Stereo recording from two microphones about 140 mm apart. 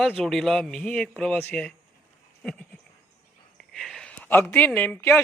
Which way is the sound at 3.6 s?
Centre (ahead or behind).